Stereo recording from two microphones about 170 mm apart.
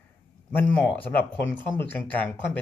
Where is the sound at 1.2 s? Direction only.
10° left (ahead or behind).